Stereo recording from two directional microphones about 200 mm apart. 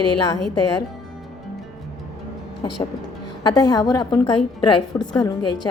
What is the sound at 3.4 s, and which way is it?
A woman's voice, 20° left (ahead or behind).